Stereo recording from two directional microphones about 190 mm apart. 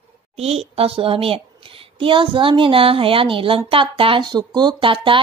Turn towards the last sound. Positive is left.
turn(degrees=-25)  # may be behind; listen again after turning